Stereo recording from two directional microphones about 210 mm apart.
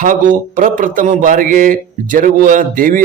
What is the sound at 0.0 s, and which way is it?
Speech, 40° right (ahead or behind).